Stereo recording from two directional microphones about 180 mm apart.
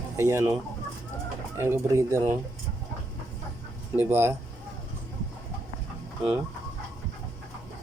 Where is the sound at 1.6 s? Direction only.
15° right (ahead or behind).